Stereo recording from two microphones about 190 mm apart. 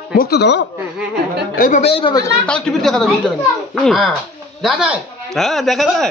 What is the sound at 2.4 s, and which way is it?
Speech, 5° left (ahead or behind).